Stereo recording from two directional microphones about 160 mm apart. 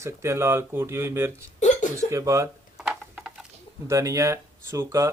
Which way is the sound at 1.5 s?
50° left (ahead or behind).